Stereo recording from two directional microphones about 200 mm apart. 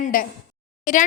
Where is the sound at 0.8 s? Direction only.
40° left (ahead or behind).